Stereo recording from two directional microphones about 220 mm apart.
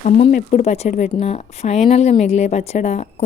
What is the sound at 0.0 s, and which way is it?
Speech, 35° left (ahead or behind).